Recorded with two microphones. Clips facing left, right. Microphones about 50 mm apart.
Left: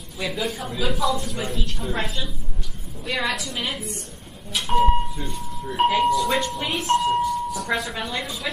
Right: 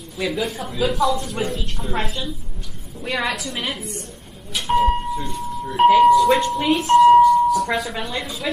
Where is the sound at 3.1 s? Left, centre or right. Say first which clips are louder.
Right 2 dB; right.